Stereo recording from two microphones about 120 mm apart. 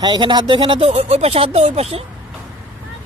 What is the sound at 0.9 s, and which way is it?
Speech, 65° right (ahead or behind).